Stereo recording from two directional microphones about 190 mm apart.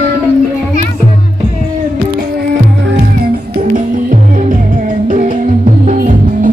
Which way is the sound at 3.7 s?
45° right (ahead or behind).